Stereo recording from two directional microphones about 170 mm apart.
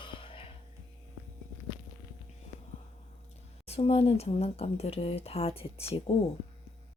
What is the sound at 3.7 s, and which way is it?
Speech, 35° left (ahead or behind).